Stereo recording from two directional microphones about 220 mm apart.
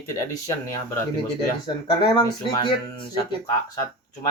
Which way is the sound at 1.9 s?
20° left (ahead or behind).